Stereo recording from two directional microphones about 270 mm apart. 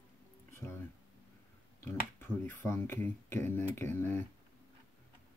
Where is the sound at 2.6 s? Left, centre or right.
Centre.